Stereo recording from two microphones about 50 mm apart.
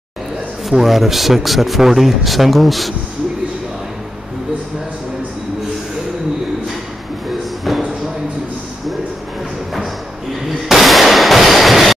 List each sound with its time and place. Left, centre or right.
0.7 s a man's voice: centre
10.7 s gunshot: centre